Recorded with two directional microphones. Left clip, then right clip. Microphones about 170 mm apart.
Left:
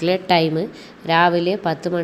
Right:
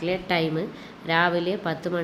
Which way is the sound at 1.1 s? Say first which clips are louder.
Left 6 dB; 30° left (ahead or behind).